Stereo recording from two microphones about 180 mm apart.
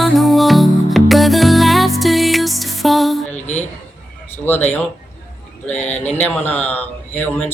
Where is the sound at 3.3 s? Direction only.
40° left (ahead or behind).